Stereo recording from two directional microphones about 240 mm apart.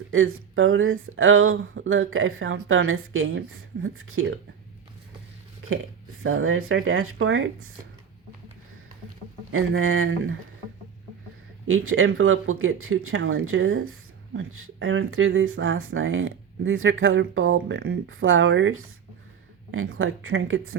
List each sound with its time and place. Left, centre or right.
0.1 s speech: right
6.2 s speech: right
9.5 s speech: right
11.7 s speech: right